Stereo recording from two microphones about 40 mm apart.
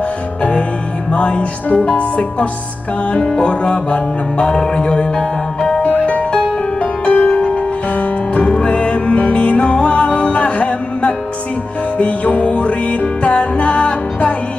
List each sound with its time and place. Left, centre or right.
0.4 s music: left
4.6 s speech: left
5.9 s music: left